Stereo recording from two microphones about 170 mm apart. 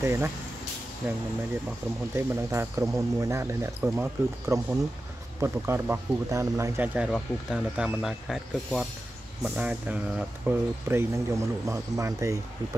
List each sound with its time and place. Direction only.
0.0 s speech: 15° right (ahead or behind)
2.1 s speech: 15° right (ahead or behind)